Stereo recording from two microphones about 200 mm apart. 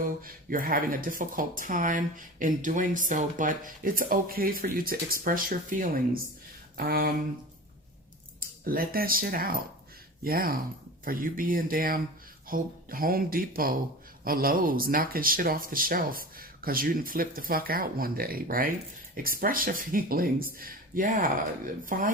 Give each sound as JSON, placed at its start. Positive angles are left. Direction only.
{"t": 0.2, "sound": "speech", "side_deg": -45}
{"t": 8.6, "sound": "speech", "side_deg": -45}